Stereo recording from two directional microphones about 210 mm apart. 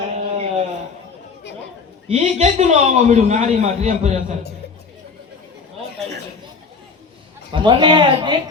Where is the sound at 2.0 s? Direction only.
30° right (ahead or behind).